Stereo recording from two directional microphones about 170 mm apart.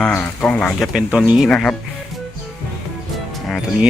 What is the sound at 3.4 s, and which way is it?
Speech, centre (ahead or behind).